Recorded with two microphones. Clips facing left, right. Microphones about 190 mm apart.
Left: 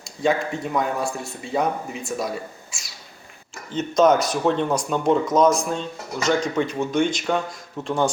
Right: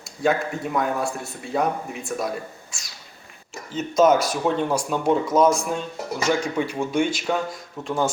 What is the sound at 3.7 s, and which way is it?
Speech, 5° right (ahead or behind).